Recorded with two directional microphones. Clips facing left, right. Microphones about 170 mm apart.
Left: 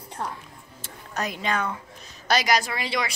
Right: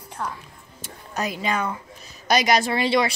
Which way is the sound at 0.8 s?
10° right (ahead or behind).